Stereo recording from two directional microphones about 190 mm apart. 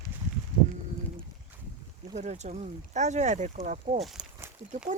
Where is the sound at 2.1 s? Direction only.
35° right (ahead or behind).